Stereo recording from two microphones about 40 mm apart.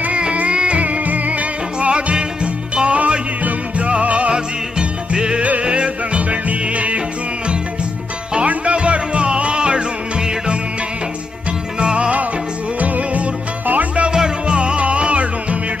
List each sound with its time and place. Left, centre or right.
0.0 s music: right
8.4 s music: right
11.8 s music: right
14.0 s music: right